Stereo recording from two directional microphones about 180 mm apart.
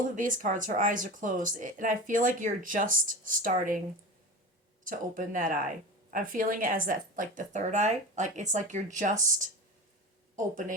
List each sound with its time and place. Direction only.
0.2 s speech: 45° right (ahead or behind)
4.8 s speech: 45° right (ahead or behind)